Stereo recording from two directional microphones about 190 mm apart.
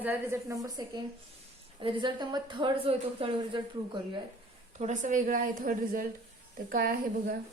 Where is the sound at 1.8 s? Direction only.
25° right (ahead or behind).